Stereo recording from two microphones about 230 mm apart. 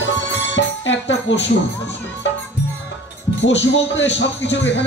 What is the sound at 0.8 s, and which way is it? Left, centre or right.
Speech, left.